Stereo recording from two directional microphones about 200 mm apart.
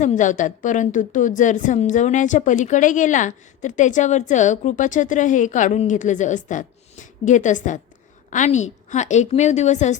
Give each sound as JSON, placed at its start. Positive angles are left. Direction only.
{"t": 0.0, "sound": "a woman's voice", "side_deg": 35}